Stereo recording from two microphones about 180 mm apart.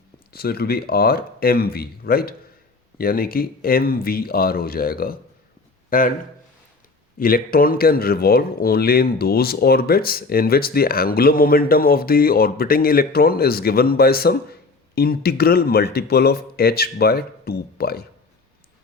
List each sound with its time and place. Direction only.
0.3 s a man's voice: 60° left (ahead or behind)
7.2 s speech: 55° left (ahead or behind)